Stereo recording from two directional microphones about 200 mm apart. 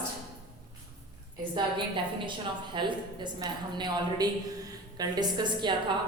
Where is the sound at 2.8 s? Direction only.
25° right (ahead or behind).